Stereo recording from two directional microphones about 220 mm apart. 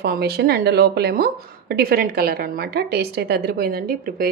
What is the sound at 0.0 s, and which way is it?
A woman's voice, 45° right (ahead or behind).